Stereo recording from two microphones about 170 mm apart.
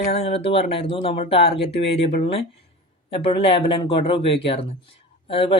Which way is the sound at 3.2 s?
30° left (ahead or behind).